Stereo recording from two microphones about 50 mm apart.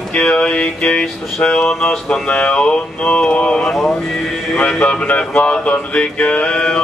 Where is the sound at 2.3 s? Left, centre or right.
Left.